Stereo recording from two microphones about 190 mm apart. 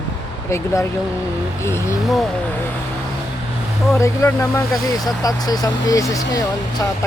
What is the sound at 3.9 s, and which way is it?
Speech, 15° left (ahead or behind).